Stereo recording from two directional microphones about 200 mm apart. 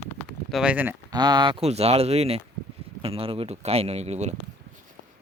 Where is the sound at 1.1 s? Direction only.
20° right (ahead or behind).